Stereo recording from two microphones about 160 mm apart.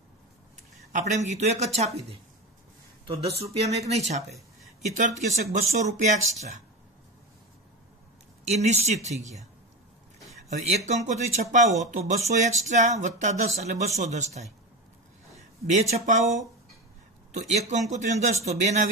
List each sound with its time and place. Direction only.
0.9 s speech: 45° right (ahead or behind)
5.3 s speech: 45° right (ahead or behind)
8.5 s speech: 45° right (ahead or behind)
10.9 s speech: 45° right (ahead or behind)
15.6 s speech: 45° right (ahead or behind)